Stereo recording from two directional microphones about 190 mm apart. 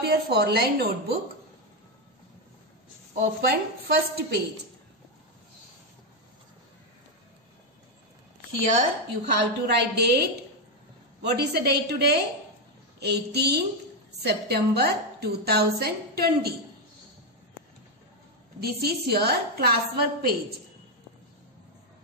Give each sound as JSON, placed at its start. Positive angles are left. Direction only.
{"t": 0.0, "sound": "a woman's voice", "side_deg": -60}
{"t": 3.3, "sound": "speech", "side_deg": -55}
{"t": 9.2, "sound": "a woman's voice", "side_deg": -60}
{"t": 18.6, "sound": "a woman's voice", "side_deg": -55}